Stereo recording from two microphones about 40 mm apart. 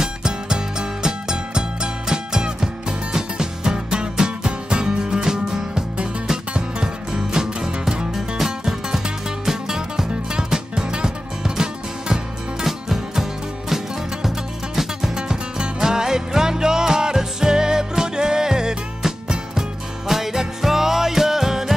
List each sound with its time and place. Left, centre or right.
0.0 s music: centre
8.4 s music: centre
15.1 s music: right